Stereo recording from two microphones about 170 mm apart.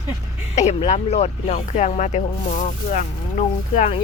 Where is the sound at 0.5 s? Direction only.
40° left (ahead or behind).